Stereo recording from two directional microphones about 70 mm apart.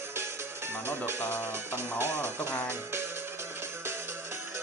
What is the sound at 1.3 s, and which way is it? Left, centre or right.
Speech, right.